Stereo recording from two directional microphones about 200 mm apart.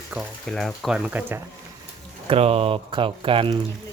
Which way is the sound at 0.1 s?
10° right (ahead or behind).